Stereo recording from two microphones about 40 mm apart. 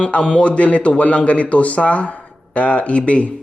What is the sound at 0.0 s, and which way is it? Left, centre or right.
A man's voice, left.